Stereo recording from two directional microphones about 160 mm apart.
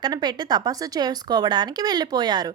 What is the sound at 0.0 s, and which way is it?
Speech, 25° right (ahead or behind).